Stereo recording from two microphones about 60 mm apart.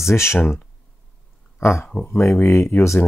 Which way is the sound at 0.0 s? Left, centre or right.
Left.